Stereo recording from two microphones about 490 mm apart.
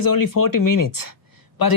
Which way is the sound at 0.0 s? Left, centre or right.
Left.